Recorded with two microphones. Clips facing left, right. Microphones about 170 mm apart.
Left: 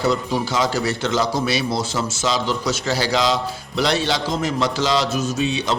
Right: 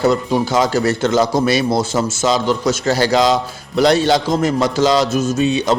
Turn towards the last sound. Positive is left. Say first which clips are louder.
# right 6 dB
turn(degrees=-45)  # may be behind; listen again after turning